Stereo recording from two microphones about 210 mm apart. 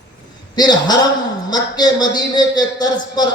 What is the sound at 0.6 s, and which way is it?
A man's voice, 20° left (ahead or behind).